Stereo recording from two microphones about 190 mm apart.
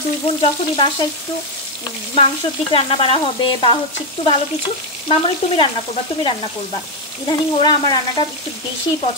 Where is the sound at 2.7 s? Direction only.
30° left (ahead or behind).